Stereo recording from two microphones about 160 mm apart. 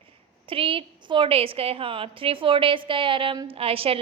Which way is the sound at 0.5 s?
35° right (ahead or behind).